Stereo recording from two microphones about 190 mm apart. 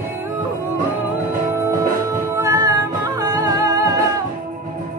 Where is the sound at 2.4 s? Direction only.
15° right (ahead or behind).